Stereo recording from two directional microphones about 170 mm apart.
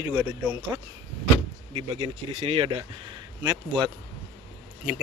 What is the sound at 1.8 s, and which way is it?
Speech, 30° right (ahead or behind).